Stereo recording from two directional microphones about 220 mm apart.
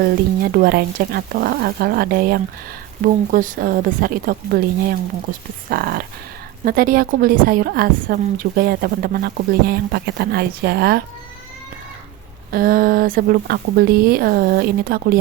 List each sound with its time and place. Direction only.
0.5 s a woman's voice: 45° right (ahead or behind)
12.5 s a woman's voice: 40° right (ahead or behind)